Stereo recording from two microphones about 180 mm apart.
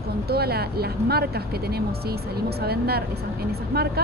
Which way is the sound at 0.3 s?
60° right (ahead or behind).